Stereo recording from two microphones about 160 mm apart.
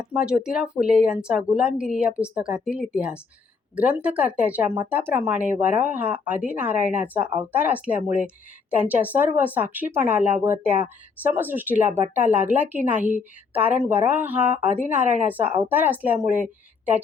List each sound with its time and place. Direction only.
0.0 s speech: 5° right (ahead or behind)
11.9 s speech: 45° right (ahead or behind)
12.1 s speech: 10° right (ahead or behind)
15.0 s speech: 45° right (ahead or behind)
15.3 s a woman's voice: 10° right (ahead or behind)